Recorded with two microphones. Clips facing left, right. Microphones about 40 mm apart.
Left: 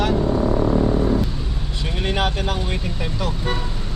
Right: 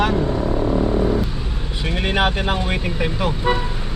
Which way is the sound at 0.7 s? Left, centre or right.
Centre.